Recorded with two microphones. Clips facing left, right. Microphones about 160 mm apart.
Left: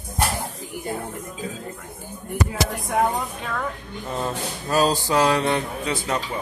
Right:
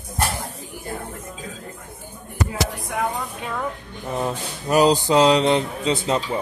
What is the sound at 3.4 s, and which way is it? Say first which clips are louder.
Speech: right 1 dB; 15° right (ahead or behind).